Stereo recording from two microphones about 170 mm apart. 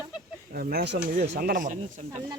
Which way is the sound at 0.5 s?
60° right (ahead or behind).